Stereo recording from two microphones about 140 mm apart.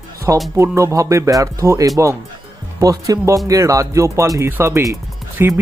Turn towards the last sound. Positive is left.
turn(degrees=-15)  # may be behind; listen again after turning